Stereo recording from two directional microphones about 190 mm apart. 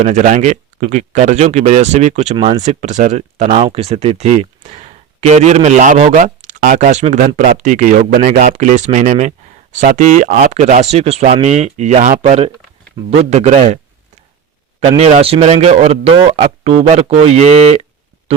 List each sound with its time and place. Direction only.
0.0 s speech: 40° right (ahead or behind)
14.8 s speech: 35° right (ahead or behind)